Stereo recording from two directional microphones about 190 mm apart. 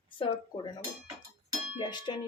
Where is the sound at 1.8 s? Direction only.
25° left (ahead or behind).